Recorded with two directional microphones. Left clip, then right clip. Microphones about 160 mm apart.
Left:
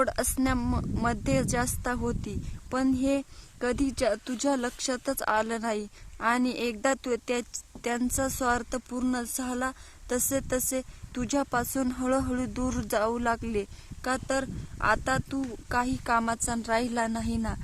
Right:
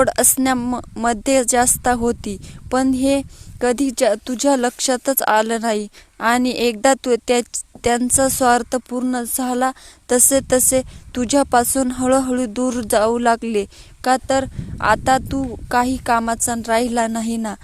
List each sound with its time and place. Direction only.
0.0 s speech: 40° right (ahead or behind)